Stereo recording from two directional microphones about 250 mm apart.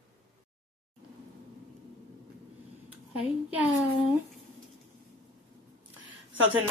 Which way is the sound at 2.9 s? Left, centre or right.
Centre.